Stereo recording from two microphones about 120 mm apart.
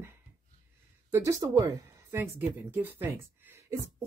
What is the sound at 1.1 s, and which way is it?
Speech, 25° right (ahead or behind).